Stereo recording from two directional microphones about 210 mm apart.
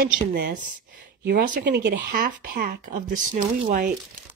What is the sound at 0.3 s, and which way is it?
Speech, 50° right (ahead or behind).